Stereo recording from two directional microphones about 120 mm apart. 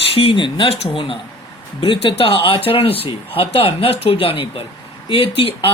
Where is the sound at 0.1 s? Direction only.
50° left (ahead or behind).